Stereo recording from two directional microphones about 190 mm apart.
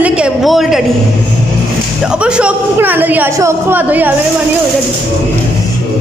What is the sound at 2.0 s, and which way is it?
A man's voice, 5° right (ahead or behind).